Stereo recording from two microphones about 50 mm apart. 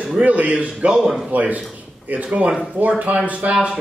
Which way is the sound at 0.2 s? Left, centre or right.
Right.